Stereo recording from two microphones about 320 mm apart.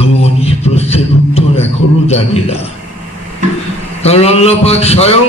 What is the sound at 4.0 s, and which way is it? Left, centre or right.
A man's voice, centre.